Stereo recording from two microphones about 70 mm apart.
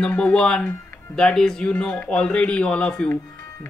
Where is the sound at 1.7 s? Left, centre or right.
Left.